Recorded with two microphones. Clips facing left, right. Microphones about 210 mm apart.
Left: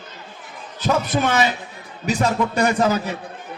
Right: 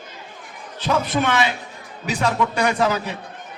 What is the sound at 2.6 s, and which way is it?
Speech, 45° left (ahead or behind).